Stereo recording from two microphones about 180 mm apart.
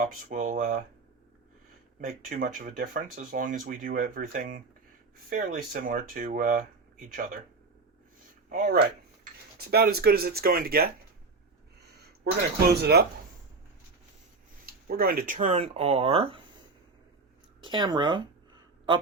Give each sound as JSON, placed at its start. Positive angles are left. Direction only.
{"t": 0.0, "sound": "speech", "side_deg": -50}
{"t": 2.0, "sound": "speech", "side_deg": -50}
{"t": 8.4, "sound": "speech", "side_deg": -55}
{"t": 12.2, "sound": "speech", "side_deg": -60}
{"t": 14.7, "sound": "speech", "side_deg": -55}
{"t": 17.6, "sound": "a sound", "side_deg": -25}